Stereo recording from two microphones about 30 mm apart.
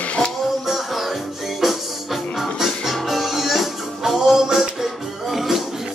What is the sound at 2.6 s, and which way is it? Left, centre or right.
Music, centre.